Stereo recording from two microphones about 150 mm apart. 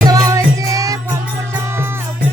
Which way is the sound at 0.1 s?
25° right (ahead or behind).